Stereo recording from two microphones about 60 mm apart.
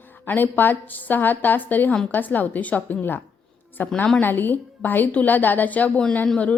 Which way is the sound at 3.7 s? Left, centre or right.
Left.